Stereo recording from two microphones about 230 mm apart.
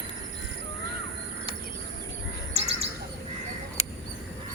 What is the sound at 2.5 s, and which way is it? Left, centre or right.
Bird, right.